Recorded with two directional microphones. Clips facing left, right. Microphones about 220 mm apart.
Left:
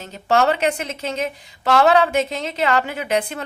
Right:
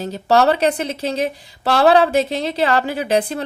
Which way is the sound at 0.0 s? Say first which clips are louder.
Right 3 dB; 35° right (ahead or behind).